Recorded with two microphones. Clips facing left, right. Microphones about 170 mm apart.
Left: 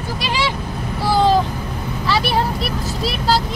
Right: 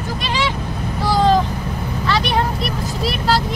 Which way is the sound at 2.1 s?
5° left (ahead or behind).